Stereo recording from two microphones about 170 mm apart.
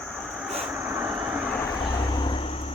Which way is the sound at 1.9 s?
30° left (ahead or behind).